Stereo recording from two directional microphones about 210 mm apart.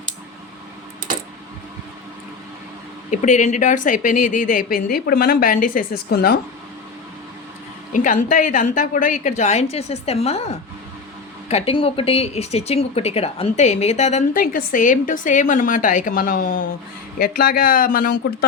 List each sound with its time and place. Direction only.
3.1 s speech: 35° left (ahead or behind)
7.9 s speech: 40° left (ahead or behind)